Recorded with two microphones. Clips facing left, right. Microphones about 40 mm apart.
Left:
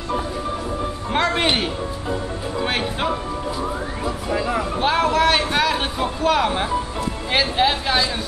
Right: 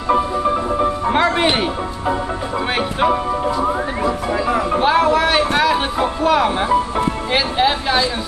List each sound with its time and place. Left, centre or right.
1.1 s music: centre
3.1 s music: right
4.0 s music: centre
4.7 s a sound: centre
6.2 s speech: centre